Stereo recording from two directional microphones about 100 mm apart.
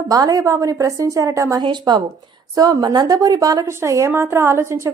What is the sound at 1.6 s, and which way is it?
A woman's voice, 50° right (ahead or behind).